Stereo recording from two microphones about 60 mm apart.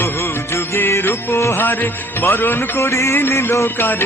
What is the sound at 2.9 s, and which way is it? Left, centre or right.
Music, left.